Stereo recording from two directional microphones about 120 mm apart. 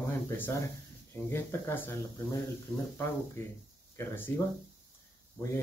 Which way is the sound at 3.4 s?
20° left (ahead or behind).